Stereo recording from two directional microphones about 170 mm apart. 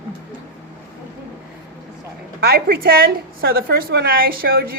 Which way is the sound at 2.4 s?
65° right (ahead or behind).